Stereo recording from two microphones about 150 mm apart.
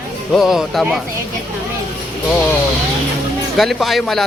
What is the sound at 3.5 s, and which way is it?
Speech, centre (ahead or behind).